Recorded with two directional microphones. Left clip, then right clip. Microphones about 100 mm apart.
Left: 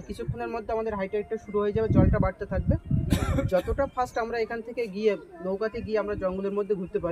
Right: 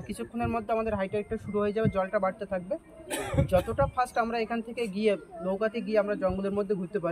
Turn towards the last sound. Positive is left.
turn(degrees=30)  # may be behind; listen again after turning